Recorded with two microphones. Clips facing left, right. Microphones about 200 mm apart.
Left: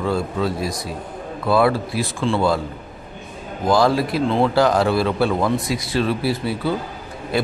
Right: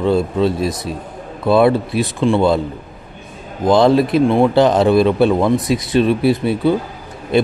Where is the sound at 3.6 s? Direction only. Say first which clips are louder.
Right 5 dB; 20° right (ahead or behind).